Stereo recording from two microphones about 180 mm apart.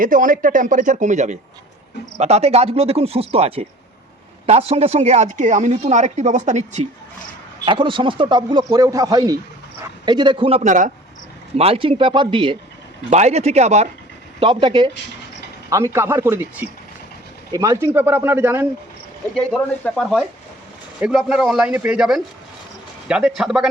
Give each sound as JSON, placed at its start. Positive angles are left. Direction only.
{"t": 0.0, "sound": "speech", "side_deg": -50}
{"t": 7.6, "sound": "speech", "side_deg": -30}
{"t": 11.5, "sound": "speech", "side_deg": -30}
{"t": 13.1, "sound": "speech", "side_deg": -40}
{"t": 15.7, "sound": "speech", "side_deg": -15}
{"t": 19.3, "sound": "a man's voice", "side_deg": 5}